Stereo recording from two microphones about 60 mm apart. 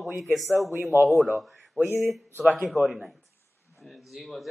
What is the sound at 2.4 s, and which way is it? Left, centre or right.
Speech, centre.